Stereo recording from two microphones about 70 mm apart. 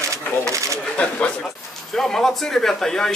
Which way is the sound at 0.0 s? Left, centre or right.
Right.